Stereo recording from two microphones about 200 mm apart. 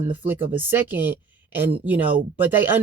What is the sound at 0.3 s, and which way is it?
Speech, 10° right (ahead or behind).